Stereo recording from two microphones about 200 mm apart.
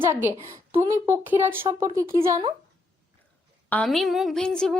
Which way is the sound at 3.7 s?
5° left (ahead or behind).